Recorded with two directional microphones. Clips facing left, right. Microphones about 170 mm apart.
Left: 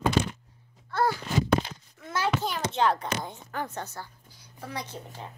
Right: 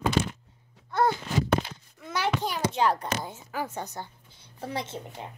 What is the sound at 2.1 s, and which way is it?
A child's voice, 15° right (ahead or behind).